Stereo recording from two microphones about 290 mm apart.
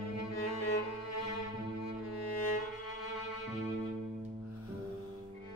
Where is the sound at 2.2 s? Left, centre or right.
Left.